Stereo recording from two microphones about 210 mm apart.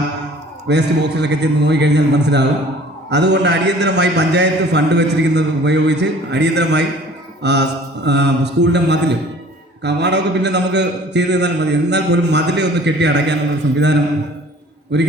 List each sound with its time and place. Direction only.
0.7 s a man's voice: 55° right (ahead or behind)